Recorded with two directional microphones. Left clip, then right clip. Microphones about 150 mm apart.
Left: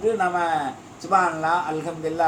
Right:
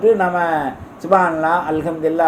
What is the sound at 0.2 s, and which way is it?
Speech, 60° right (ahead or behind).